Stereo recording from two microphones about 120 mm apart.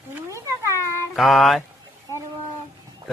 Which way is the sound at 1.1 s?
Centre (ahead or behind).